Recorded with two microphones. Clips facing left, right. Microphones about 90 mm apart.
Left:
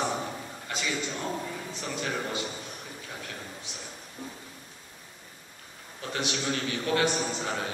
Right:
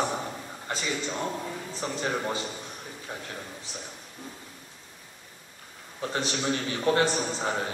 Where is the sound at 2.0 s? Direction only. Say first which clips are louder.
Right 2 dB; 30° right (ahead or behind).